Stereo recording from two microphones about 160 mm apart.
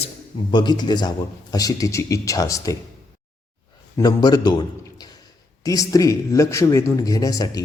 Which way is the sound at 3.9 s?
25° left (ahead or behind).